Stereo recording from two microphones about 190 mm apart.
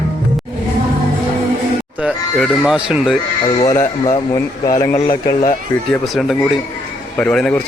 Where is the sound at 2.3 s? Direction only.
Centre (ahead or behind).